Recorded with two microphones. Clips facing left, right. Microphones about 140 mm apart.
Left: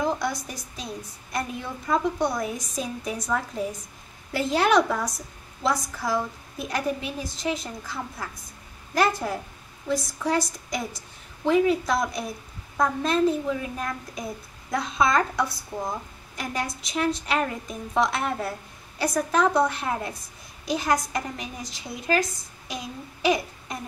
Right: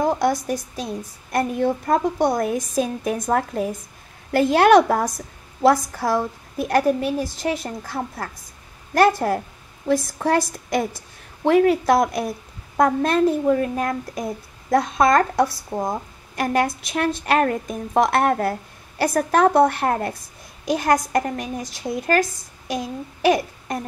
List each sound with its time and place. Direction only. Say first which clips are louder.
0.0 s a woman's voice: right 7 dB; 50° right (ahead or behind)